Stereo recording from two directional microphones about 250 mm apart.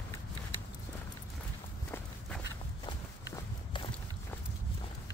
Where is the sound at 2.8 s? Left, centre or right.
Centre.